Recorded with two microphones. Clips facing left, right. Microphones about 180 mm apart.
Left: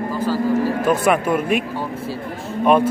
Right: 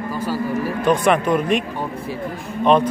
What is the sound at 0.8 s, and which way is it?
Speech, 5° left (ahead or behind).